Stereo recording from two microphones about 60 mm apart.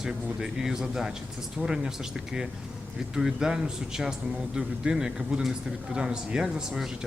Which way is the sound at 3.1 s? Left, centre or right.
Centre.